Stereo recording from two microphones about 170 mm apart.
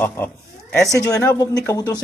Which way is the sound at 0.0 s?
10° left (ahead or behind).